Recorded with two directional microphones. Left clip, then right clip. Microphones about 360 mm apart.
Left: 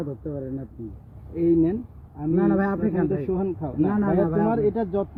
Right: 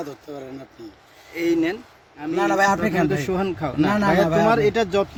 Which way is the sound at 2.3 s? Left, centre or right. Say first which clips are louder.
Right 5 dB; right.